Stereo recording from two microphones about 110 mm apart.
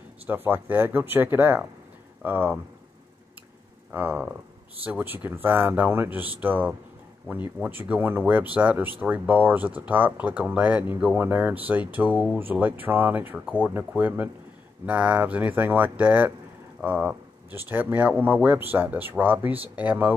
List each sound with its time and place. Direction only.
0.3 s speech: 15° right (ahead or behind)
3.9 s speech: 15° right (ahead or behind)